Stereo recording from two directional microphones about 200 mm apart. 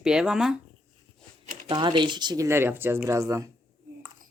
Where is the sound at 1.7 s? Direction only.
25° right (ahead or behind).